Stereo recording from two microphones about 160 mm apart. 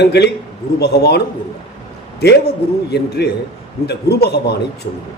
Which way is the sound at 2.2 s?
90° left.